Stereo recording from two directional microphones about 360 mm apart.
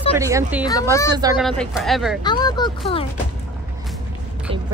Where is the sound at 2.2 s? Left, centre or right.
Centre.